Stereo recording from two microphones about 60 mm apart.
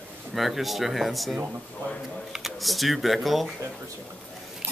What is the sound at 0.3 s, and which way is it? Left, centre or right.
A man's voice, centre.